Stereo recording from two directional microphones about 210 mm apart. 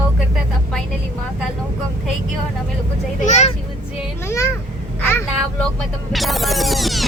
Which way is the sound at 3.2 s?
35° left (ahead or behind).